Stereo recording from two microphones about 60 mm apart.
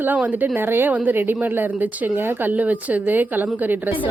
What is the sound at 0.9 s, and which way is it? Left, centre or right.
Speech, right.